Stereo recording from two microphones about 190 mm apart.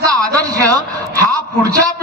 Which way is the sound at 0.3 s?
20° right (ahead or behind).